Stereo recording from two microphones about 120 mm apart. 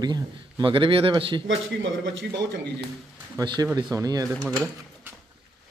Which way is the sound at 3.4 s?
30° right (ahead or behind).